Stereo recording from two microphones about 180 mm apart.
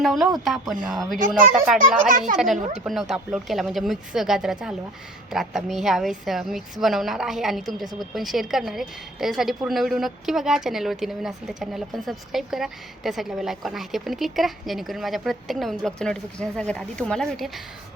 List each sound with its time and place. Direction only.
0.0 s a woman's voice: centre (ahead or behind)
2.0 s speech: 45° right (ahead or behind)
2.3 s a woman's voice: centre (ahead or behind)